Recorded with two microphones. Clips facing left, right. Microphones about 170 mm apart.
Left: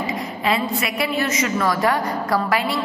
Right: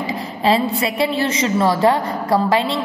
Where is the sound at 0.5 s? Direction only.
30° right (ahead or behind).